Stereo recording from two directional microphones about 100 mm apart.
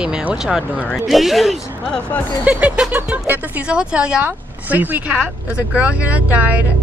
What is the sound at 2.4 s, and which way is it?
Speech, 10° right (ahead or behind).